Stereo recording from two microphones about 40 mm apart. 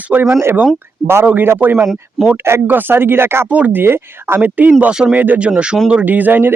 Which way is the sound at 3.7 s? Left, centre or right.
Right.